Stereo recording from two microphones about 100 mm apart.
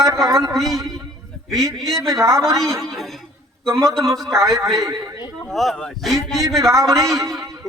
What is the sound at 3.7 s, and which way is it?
Speech, 30° right (ahead or behind).